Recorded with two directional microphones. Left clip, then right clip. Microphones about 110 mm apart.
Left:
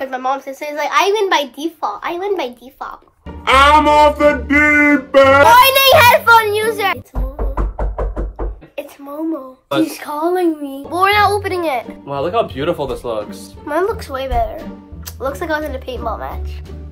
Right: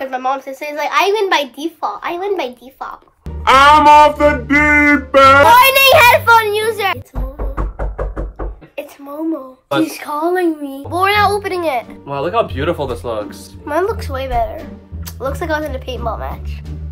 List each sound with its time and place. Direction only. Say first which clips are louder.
0.0 s a woman's voice: right 1 dB; centre (ahead or behind)
3.4 s music: right 2 dB; 55° right (ahead or behind)
4.2 s speech: even; 45° right (ahead or behind)
5.5 s a woman's voice: right 1 dB; centre (ahead or behind)
8.7 s a sound: right 1 dB; centre (ahead or behind)
9.8 s a woman's voice: right 1 dB; centre (ahead or behind)
12.1 s speech: right 1 dB; 30° right (ahead or behind)
13.7 s a woman's voice: even; centre (ahead or behind)